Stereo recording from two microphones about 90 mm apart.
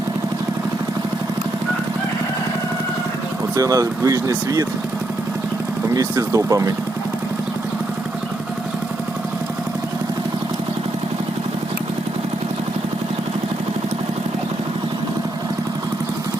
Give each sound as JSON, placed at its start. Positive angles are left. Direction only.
{"t": 3.5, "sound": "speech", "side_deg": -40}
{"t": 5.9, "sound": "speech", "side_deg": -40}